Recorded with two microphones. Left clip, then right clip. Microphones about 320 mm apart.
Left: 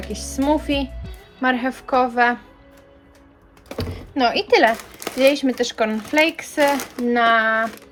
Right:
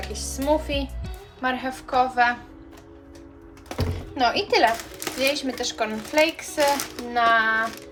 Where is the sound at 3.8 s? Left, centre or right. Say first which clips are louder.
Left 3 dB; left.